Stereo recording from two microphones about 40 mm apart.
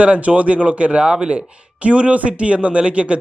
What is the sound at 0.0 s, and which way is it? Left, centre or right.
Speech, right.